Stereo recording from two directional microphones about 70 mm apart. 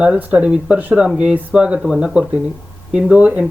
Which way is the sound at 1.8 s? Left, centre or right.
Centre.